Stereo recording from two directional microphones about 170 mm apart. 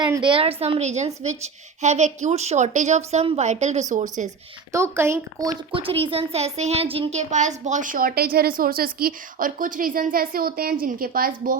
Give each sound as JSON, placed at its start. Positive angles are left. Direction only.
{"t": 0.0, "sound": "a child's voice", "side_deg": -25}
{"t": 4.7, "sound": "speech", "side_deg": -15}
{"t": 5.8, "sound": "a child's voice", "side_deg": -30}